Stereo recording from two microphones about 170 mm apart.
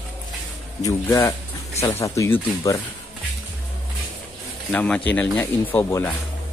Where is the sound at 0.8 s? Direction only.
20° left (ahead or behind).